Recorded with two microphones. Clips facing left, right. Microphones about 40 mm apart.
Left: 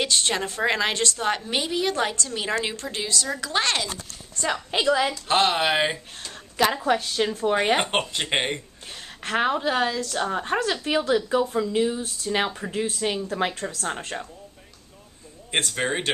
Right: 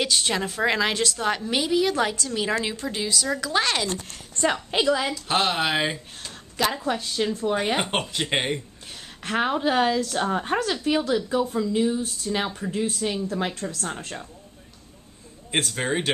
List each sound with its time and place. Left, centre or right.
0.0 s a woman's voice: centre
3.1 s a woman's voice: centre
10.7 s a woman's voice: centre
15.5 s a woman's voice: centre